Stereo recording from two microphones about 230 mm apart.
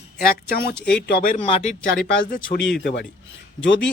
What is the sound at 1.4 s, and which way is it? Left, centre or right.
Speech, left.